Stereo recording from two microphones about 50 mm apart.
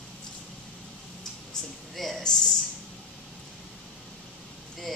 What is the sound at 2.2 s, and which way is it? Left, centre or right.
Speech, centre.